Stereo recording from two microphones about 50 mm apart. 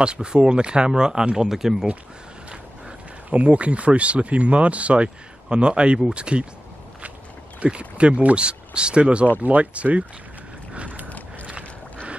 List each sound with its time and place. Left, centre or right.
0.0 s speech: centre
3.3 s speech: right
7.6 s speech: right
10.7 s mechanisms: right
11.1 s a sound: left
11.4 s a sound: right